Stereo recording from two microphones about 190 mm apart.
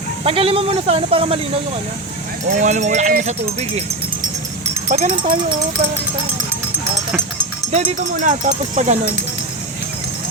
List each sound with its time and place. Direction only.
0.3 s speech: 30° right (ahead or behind)
2.5 s speech: 40° right (ahead or behind)
4.9 s speech: 35° right (ahead or behind)
7.7 s speech: 40° right (ahead or behind)